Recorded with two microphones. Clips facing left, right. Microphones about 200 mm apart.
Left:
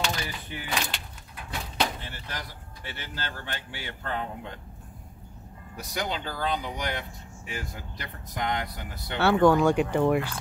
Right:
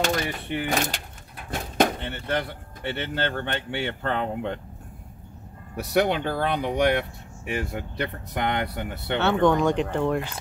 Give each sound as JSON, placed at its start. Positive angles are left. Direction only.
{"t": 0.0, "sound": "speech", "side_deg": -50}
{"t": 0.7, "sound": "speech", "side_deg": -45}
{"t": 5.8, "sound": "speech", "side_deg": -65}
{"t": 9.2, "sound": "speech", "side_deg": 5}